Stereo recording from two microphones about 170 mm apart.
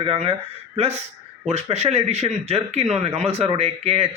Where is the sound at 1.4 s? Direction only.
40° right (ahead or behind).